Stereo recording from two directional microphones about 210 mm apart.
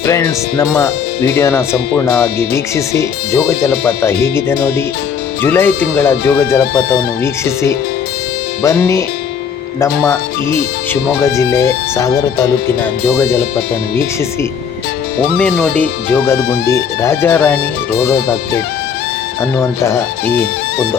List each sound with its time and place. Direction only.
0.0 s speech: 15° left (ahead or behind)
2.7 s speech: 15° left (ahead or behind)
8.6 s speech: 15° left (ahead or behind)
11.2 s speech: 15° left (ahead or behind)
15.4 s speech: 5° left (ahead or behind)
19.4 s speech: 15° left (ahead or behind)